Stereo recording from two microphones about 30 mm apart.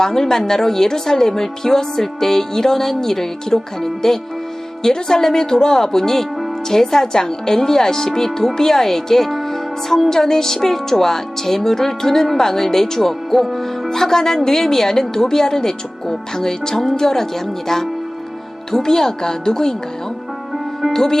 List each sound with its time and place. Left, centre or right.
0.0 s a woman's voice: centre
20.9 s a woman's voice: centre